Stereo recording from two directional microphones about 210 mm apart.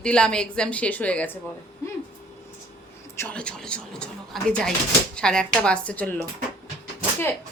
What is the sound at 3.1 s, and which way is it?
A woman's voice, 10° left (ahead or behind).